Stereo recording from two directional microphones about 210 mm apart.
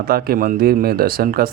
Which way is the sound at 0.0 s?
45° right (ahead or behind).